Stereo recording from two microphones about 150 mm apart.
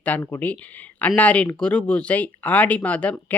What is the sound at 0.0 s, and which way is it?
Speech, 10° left (ahead or behind).